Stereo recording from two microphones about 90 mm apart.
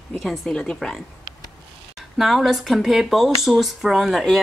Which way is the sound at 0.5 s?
10° left (ahead or behind).